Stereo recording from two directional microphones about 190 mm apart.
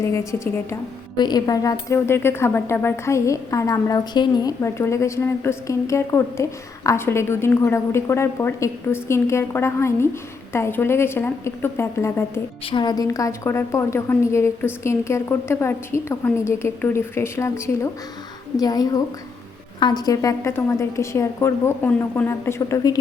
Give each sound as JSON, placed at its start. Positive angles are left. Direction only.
{"t": 0.0, "sound": "speech", "side_deg": 15}
{"t": 12.6, "sound": "a woman's voice", "side_deg": 25}